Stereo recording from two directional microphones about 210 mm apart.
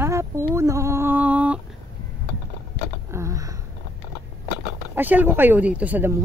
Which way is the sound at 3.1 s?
15° right (ahead or behind).